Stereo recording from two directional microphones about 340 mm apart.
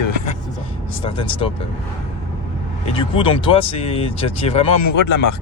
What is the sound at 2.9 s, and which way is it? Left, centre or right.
Speech, centre.